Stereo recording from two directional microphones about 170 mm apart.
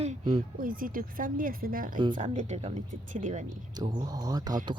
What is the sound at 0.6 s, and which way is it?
Speech, 55° right (ahead or behind).